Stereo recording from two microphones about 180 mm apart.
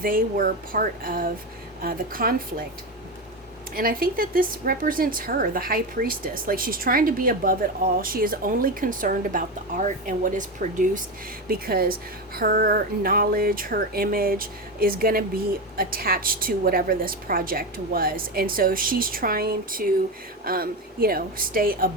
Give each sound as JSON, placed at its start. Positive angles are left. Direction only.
{"t": 0.0, "sound": "a woman's voice", "side_deg": -55}
{"t": 3.8, "sound": "a woman's voice", "side_deg": -55}